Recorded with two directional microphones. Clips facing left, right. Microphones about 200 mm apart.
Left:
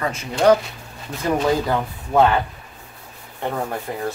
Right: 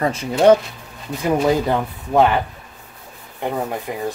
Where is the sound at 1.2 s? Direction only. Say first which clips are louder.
Right 2 dB; 15° right (ahead or behind).